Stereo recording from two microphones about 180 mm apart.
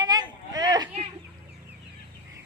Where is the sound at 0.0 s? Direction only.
20° right (ahead or behind).